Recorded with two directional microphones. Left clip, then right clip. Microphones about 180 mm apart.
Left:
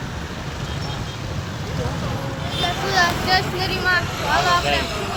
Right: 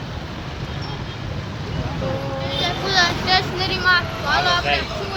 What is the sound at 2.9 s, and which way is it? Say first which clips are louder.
Vehicle: right 1 dB; 10° right (ahead or behind).